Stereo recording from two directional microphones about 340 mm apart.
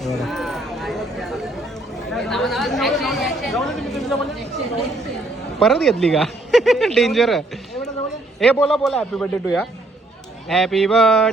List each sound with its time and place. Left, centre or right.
0.0 s a sound: centre
2.0 s chatter: centre
5.5 s a man's voice: centre